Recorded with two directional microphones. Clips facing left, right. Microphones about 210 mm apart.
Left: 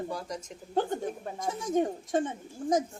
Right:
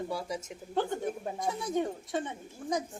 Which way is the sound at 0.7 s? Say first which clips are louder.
Left 1 dB; 45° left (ahead or behind).